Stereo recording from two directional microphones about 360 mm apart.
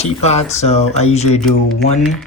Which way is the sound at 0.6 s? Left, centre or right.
Centre.